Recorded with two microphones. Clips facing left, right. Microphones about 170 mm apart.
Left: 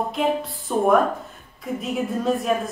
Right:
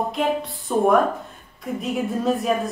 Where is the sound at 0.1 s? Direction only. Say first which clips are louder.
Even; centre (ahead or behind).